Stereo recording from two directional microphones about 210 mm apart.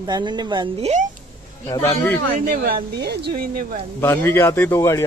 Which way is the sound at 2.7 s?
50° right (ahead or behind).